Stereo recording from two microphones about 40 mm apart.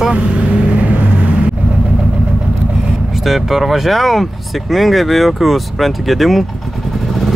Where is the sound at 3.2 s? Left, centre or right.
Centre.